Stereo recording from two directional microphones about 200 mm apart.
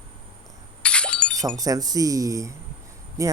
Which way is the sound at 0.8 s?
5° left (ahead or behind).